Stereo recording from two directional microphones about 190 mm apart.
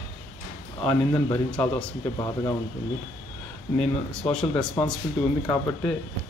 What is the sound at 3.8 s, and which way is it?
Speech, 5° left (ahead or behind).